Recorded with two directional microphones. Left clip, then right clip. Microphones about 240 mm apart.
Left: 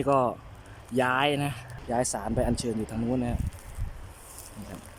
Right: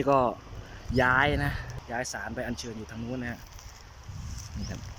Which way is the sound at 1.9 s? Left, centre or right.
Left.